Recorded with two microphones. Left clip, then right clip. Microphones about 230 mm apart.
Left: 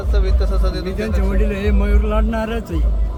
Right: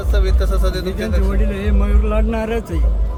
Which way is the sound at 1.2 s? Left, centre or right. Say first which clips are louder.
Left 2 dB; left.